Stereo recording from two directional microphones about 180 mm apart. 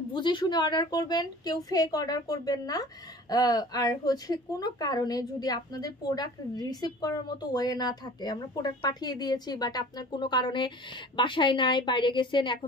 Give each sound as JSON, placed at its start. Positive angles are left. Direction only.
{"t": 0.1, "sound": "speech", "side_deg": 25}